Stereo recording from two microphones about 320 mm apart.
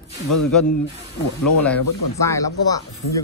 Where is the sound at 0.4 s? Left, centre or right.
Left.